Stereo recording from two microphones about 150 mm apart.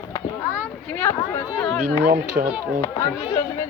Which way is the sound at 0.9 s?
15° left (ahead or behind).